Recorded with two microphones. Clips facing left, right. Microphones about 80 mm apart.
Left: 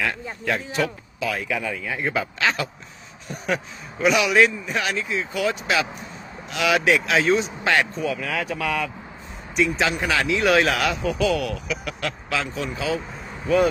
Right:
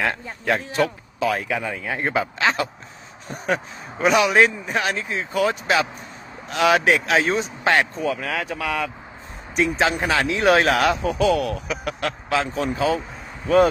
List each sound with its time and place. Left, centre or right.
1.2 s speech: right